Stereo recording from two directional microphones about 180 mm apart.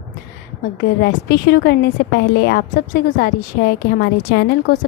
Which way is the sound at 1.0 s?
65° left (ahead or behind).